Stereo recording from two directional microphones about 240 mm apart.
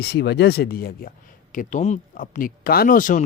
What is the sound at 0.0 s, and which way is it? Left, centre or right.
Speech, left.